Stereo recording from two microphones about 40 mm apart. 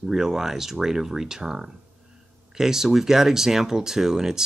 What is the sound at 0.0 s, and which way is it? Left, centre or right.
Speech, centre.